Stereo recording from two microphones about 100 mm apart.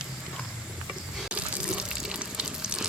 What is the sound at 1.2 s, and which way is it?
Water, 10° right (ahead or behind).